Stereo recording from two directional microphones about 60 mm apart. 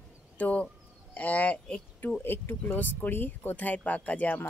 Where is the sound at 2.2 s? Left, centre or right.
Left.